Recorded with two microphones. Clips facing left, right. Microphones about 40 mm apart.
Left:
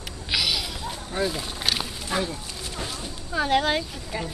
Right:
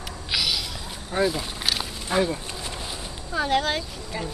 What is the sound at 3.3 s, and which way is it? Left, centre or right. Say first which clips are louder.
Speech: left 1 dB; centre.